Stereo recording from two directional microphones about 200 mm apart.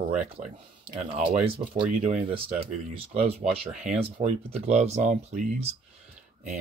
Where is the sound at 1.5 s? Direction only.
30° right (ahead or behind).